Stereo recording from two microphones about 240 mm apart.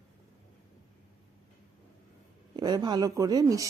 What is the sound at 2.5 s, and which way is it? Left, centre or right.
Speech, centre.